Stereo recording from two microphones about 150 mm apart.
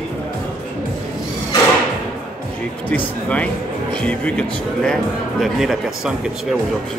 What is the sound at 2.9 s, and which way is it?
Speech, 10° left (ahead or behind).